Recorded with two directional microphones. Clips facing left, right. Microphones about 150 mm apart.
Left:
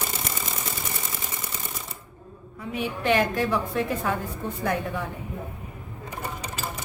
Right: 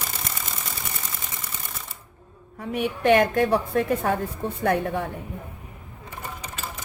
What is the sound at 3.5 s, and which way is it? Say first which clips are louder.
Speech: right 4 dB; 40° right (ahead or behind).